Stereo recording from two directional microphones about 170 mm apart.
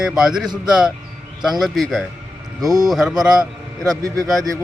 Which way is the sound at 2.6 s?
20° right (ahead or behind).